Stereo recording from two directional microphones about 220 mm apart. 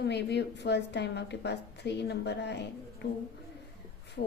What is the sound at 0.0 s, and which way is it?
A woman's voice, 50° left (ahead or behind).